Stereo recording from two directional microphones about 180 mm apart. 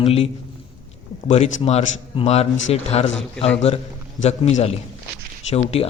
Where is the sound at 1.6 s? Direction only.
35° left (ahead or behind).